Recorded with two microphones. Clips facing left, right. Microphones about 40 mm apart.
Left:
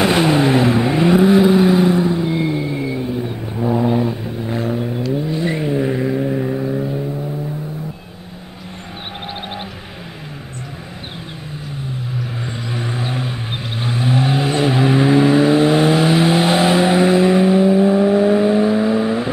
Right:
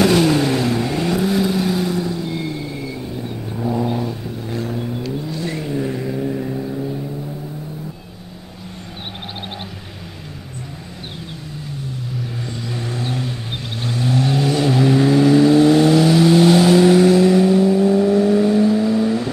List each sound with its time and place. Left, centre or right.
0.0 s vehicle: left
12.4 s vehicle: left